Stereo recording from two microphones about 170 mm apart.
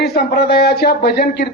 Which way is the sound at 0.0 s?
70° left (ahead or behind).